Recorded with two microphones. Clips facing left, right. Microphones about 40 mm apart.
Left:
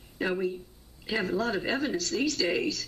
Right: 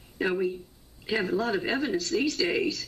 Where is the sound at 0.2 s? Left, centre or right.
Centre.